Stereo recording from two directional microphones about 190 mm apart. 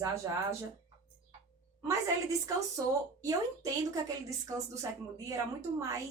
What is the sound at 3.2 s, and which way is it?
A woman's voice, 20° right (ahead or behind).